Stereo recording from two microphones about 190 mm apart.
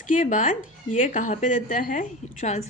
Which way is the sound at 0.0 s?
40° left (ahead or behind).